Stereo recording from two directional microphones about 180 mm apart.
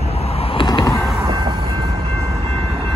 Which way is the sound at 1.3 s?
25° right (ahead or behind).